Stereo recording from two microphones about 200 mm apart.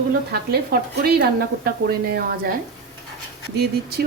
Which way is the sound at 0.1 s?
50° right (ahead or behind).